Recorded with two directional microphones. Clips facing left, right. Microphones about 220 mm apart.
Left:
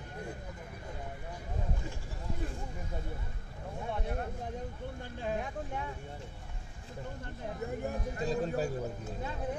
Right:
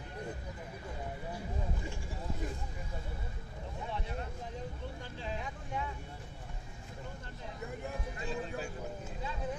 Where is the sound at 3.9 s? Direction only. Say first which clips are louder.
Left 5 dB; 50° left (ahead or behind).